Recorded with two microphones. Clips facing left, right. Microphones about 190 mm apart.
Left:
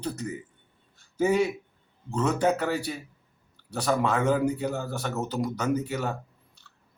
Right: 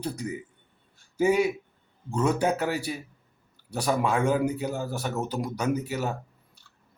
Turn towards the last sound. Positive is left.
turn(degrees=-10)  # may be behind; listen again after turning